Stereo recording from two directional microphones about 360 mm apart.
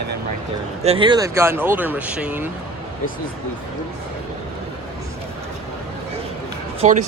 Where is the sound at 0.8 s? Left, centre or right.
Centre.